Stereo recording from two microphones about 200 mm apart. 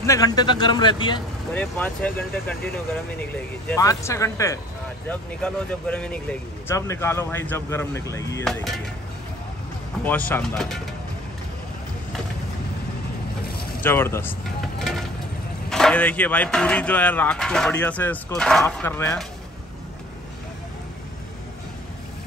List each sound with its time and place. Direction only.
0.0 s a man's voice: 15° left (ahead or behind)
1.5 s speech: 5° left (ahead or behind)
8.5 s speech: centre (ahead or behind)
10.0 s speech: 10° left (ahead or behind)
13.8 s speech: 10° left (ahead or behind)
14.8 s vehicle: centre (ahead or behind)
15.7 s speech: 5° left (ahead or behind)